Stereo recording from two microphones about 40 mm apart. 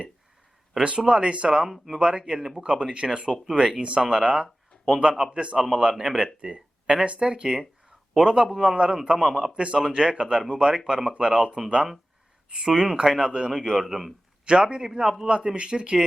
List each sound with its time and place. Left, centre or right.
0.8 s speech: right
1.6 s a man's voice: centre
2.0 s speech: right
2.4 s a man's voice: centre
2.6 s a man's voice: right
9.0 s a man's voice: centre
9.6 s a man's voice: right
12.6 s a man's voice: centre
15.3 s speech: right